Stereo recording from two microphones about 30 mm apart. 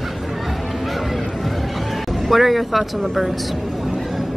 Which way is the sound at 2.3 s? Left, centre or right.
Centre.